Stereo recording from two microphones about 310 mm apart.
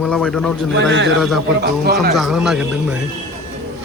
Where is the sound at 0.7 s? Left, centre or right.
Right.